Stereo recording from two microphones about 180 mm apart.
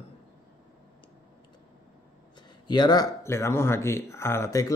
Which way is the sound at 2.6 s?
25° left (ahead or behind).